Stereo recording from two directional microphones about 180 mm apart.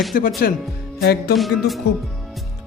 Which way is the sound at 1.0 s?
65° left (ahead or behind).